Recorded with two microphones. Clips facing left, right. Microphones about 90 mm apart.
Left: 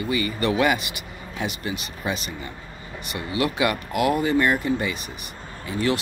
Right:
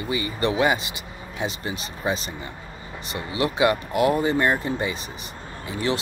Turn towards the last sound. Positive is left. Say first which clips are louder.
# left 2 dB
turn(degrees=-25)  # may be behind; listen again after turning